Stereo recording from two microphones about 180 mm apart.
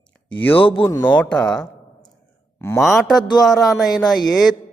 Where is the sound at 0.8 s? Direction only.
10° left (ahead or behind).